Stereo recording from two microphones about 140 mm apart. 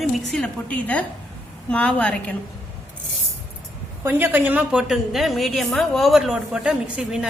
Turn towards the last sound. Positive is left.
turn(degrees=-5)  # may be behind; listen again after turning